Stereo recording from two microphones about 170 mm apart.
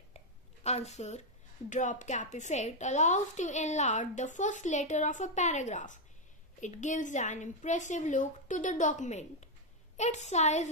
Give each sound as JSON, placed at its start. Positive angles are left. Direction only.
{"t": 0.7, "sound": "a woman's voice", "side_deg": 40}